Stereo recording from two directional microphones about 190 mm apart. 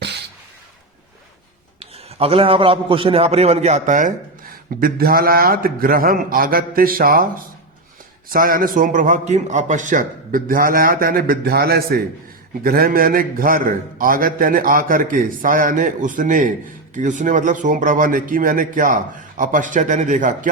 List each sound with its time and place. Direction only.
1.8 s a man's voice: 30° right (ahead or behind)